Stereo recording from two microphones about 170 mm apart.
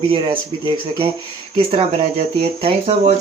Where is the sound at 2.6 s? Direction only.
35° right (ahead or behind).